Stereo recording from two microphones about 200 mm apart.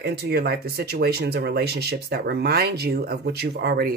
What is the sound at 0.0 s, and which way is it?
Speech, 55° right (ahead or behind).